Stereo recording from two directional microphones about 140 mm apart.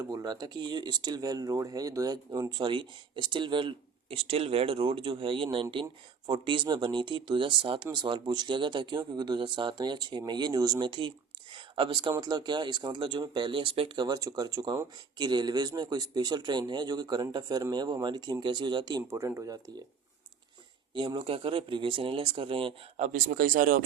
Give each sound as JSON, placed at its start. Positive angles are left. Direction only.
{"t": 0.0, "sound": "speech", "side_deg": -25}
{"t": 11.5, "sound": "a sound", "side_deg": -35}
{"t": 12.2, "sound": "speech", "side_deg": -30}
{"t": 20.9, "sound": "speech", "side_deg": -35}
{"t": 23.0, "sound": "speech", "side_deg": -65}